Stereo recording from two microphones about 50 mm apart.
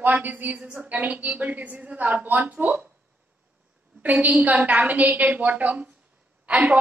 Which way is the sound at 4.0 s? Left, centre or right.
Right.